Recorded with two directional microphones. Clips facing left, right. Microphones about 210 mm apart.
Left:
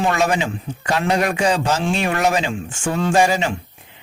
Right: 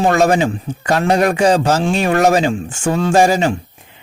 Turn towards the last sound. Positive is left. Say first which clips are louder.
# right 4 dB
turn(degrees=-40)  # may be behind; listen again after turning